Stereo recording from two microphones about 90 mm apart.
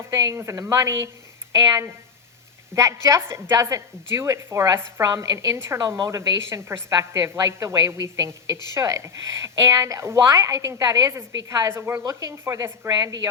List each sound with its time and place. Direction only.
0.1 s a woman's voice: 35° right (ahead or behind)
2.7 s a woman's voice: 35° right (ahead or behind)
11.1 s speech: 30° right (ahead or behind)
12.0 s speech: 40° right (ahead or behind)